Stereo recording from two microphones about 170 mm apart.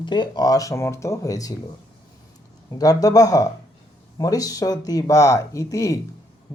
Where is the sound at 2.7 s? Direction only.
20° left (ahead or behind).